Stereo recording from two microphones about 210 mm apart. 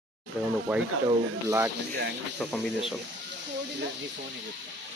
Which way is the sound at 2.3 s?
Centre (ahead or behind).